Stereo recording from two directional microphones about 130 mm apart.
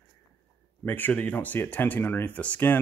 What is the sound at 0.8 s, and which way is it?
Speech, 15° left (ahead or behind).